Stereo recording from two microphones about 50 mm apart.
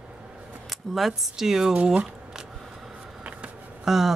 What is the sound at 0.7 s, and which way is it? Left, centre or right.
Speech, centre.